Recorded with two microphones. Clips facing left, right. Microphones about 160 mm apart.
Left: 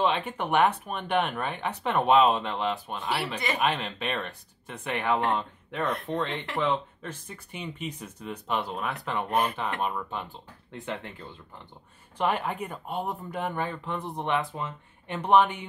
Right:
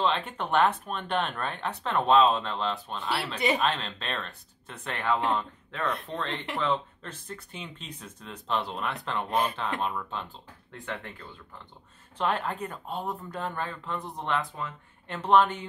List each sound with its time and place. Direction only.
0.0 s speech: 10° left (ahead or behind)
12.2 s speech: 10° left (ahead or behind)